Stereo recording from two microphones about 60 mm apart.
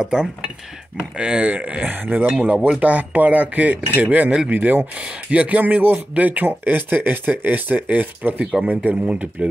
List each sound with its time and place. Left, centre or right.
0.0 s speech: centre
1.9 s a sound: right
2.4 s speech: right